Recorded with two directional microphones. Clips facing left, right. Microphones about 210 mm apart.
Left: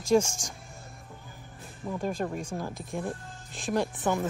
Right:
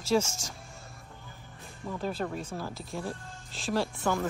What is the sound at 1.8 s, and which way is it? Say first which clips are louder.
Speech: left 2 dB; 15° left (ahead or behind).